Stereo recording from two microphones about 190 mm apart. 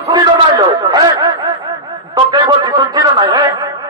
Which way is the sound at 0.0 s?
20° right (ahead or behind).